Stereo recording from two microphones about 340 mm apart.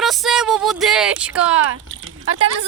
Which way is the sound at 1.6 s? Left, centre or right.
Right.